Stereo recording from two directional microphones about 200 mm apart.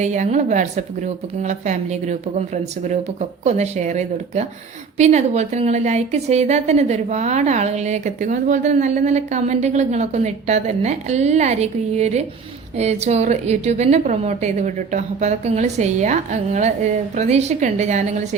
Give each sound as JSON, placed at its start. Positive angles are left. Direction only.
{"t": 0.0, "sound": "a woman's voice", "side_deg": -35}